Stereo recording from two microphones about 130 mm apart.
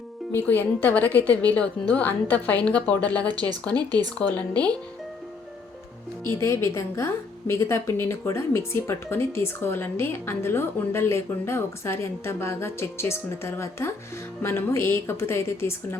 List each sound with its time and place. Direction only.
0.3 s a woman's voice: 15° left (ahead or behind)
3.8 s speech: 30° right (ahead or behind)
4.2 s a woman's voice: 10° left (ahead or behind)
6.2 s a woman's voice: 20° left (ahead or behind)